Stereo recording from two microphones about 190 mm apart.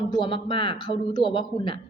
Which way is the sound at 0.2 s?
25° left (ahead or behind).